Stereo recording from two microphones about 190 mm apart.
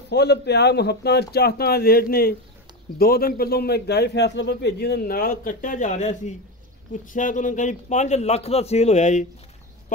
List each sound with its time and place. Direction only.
0.1 s a man's voice: 60° left (ahead or behind); by 9.3 s 40° left (ahead or behind)